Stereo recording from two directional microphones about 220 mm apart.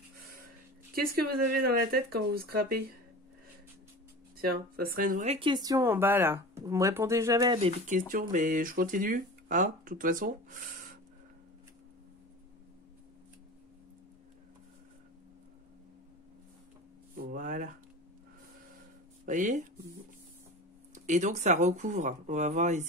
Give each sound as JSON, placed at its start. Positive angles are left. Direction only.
{"t": 1.5, "sound": "speech", "side_deg": -45}
{"t": 4.4, "sound": "speech", "side_deg": -40}
{"t": 8.1, "sound": "speech", "side_deg": -40}
{"t": 17.2, "sound": "a sound", "side_deg": -40}
{"t": 19.2, "sound": "speech", "side_deg": -35}
{"t": 20.9, "sound": "speech", "side_deg": -35}